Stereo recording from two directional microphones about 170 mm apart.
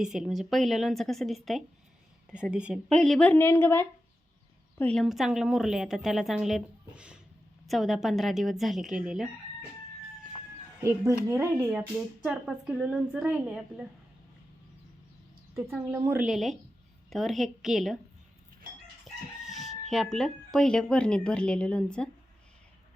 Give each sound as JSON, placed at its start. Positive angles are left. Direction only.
{"t": 0.0, "sound": "a woman's voice", "side_deg": -5}
{"t": 10.8, "sound": "speech", "side_deg": -20}
{"t": 15.5, "sound": "a woman's voice", "side_deg": -15}
{"t": 19.0, "sound": "chicken", "side_deg": 0}
{"t": 19.9, "sound": "speech", "side_deg": 0}